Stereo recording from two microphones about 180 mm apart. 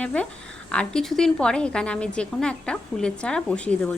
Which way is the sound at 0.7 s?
5° left (ahead or behind).